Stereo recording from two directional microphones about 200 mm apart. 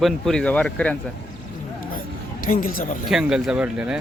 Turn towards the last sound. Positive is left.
turn(degrees=-5)  # may be behind; listen again after turning